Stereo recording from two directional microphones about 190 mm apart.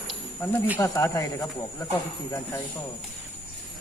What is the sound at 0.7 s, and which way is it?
Speech, 15° left (ahead or behind).